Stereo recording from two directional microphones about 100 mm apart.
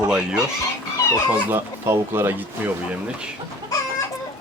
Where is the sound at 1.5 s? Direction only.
25° right (ahead or behind).